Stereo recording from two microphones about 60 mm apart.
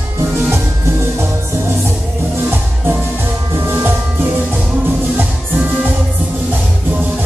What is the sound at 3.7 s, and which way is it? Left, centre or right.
Music, right.